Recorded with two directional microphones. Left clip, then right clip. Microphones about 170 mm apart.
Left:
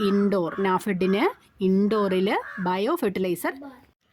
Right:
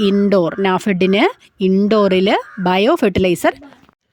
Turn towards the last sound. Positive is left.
turn(degrees=-45)  # may be behind; listen again after turning